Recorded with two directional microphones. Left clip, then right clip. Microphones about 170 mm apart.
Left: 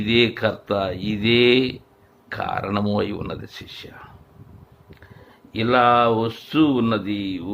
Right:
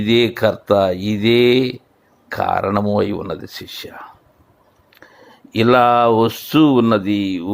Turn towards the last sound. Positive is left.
turn(degrees=-30)  # may be behind; listen again after turning